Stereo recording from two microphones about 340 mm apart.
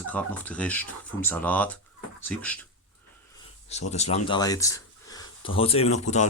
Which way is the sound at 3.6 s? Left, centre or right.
Centre.